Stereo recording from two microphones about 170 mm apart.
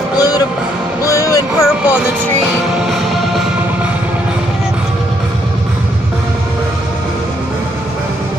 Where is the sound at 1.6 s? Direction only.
5° right (ahead or behind).